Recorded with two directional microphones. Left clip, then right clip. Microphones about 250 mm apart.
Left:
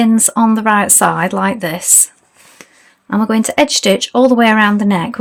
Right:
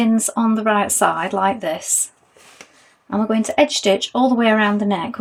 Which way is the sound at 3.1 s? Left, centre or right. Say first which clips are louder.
Left 5 dB; left.